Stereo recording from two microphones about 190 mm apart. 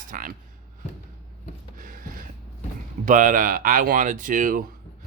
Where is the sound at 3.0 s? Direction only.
45° right (ahead or behind).